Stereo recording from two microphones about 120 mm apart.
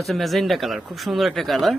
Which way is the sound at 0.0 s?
Centre (ahead or behind).